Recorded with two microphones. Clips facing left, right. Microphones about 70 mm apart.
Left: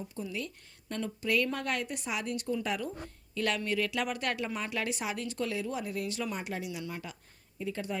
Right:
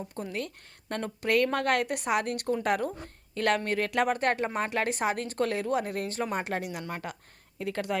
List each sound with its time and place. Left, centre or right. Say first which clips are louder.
0.1 s a woman's voice: right 3 dB; right
7.6 s a woman's voice: right 4 dB; right